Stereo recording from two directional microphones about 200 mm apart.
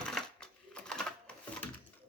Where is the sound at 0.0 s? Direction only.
5° left (ahead or behind).